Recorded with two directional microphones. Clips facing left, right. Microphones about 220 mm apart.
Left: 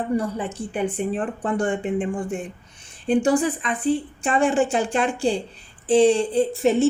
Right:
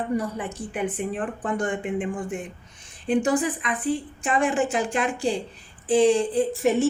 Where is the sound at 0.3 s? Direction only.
30° left (ahead or behind).